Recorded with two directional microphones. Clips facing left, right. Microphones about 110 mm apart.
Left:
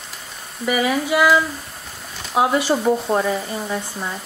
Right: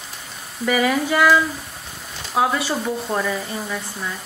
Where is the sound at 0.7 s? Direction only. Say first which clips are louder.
Even; 5° left (ahead or behind).